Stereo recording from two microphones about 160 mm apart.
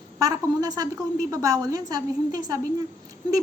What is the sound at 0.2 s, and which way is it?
A woman's voice, 20° right (ahead or behind).